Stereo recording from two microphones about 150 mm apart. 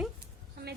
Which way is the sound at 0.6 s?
90° right.